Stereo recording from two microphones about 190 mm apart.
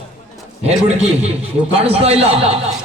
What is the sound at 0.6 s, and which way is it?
A man's voice, 35° right (ahead or behind).